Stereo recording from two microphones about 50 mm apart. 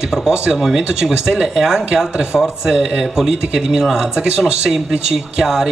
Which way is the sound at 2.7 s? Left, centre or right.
Right.